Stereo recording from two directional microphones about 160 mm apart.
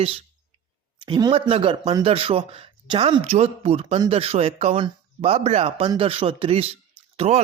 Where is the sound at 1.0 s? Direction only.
30° right (ahead or behind).